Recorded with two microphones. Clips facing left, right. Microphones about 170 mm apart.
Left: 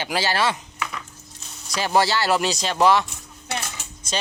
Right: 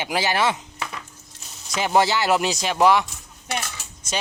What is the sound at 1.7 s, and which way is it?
Speech, 20° right (ahead or behind).